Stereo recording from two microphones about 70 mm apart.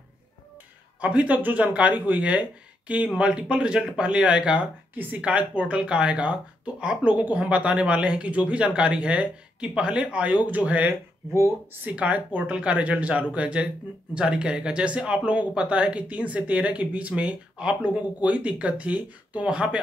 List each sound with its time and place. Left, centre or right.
1.0 s speech: centre